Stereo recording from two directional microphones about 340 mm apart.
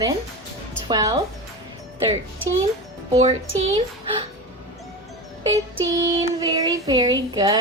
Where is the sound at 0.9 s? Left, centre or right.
Centre.